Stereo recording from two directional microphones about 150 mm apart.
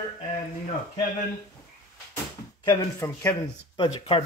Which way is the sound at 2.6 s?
25° left (ahead or behind).